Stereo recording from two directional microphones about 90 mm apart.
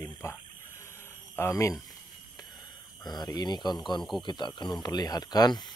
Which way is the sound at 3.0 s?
50° left (ahead or behind).